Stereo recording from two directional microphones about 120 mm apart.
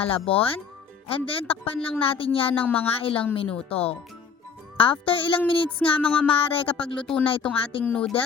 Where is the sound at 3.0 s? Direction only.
50° left (ahead or behind).